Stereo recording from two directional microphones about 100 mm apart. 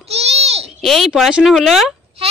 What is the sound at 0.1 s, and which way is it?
Babbling, 90° right.